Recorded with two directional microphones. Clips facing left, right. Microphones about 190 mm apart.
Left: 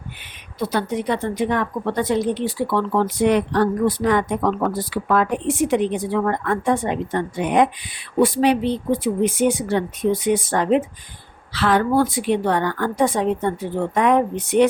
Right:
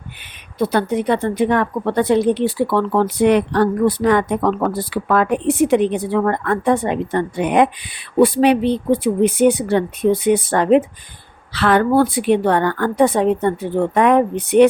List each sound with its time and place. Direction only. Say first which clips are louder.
0.6 s speech: right 5 dB; 60° right (ahead or behind)